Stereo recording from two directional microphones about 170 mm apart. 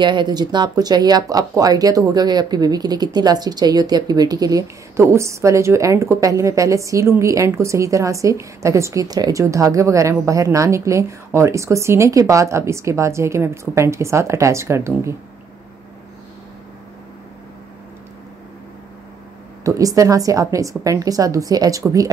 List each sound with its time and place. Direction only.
0.0 s speech: 25° right (ahead or behind)
19.6 s a woman's voice: 20° right (ahead or behind)